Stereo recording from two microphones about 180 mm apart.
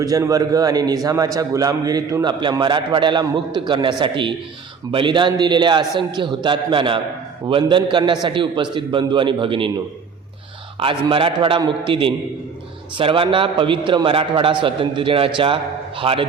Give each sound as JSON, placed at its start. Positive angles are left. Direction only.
{"t": 0.0, "sound": "a man's voice", "side_deg": -20}
{"t": 10.8, "sound": "a man's voice", "side_deg": -30}